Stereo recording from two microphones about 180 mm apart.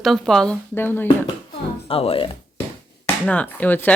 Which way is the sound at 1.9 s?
30° left (ahead or behind).